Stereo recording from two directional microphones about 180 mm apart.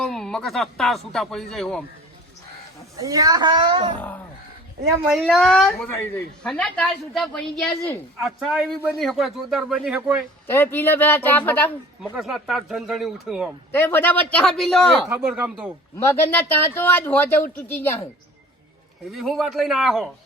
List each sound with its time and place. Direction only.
0.0 s a woman's voice: 5° left (ahead or behind)
2.9 s speech: 20° right (ahead or behind)
5.1 s a woman's voice: centre (ahead or behind)
10.4 s speech: 10° left (ahead or behind)
12.1 s a woman's voice: centre (ahead or behind)
13.7 s speech: 10° left (ahead or behind); by 15.7 s 5° right (ahead or behind)
16.0 s speech: 15° left (ahead or behind)
19.1 s a woman's voice: centre (ahead or behind)